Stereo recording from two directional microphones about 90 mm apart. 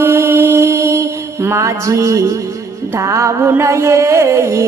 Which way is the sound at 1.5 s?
35° right (ahead or behind).